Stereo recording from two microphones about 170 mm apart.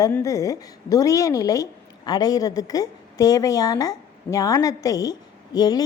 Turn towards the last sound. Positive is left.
turn(degrees=25)  # may be behind; listen again after turning